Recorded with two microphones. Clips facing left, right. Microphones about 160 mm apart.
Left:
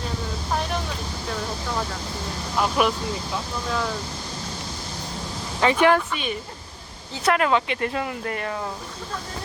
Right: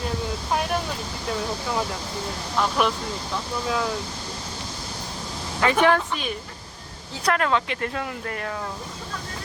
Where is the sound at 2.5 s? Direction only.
5° left (ahead or behind).